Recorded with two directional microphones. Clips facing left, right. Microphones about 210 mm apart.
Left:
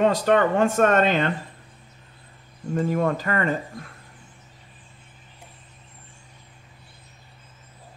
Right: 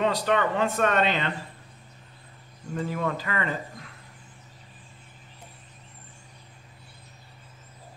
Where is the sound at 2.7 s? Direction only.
45° left (ahead or behind).